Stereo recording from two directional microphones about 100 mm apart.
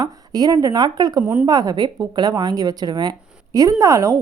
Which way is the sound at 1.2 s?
15° right (ahead or behind).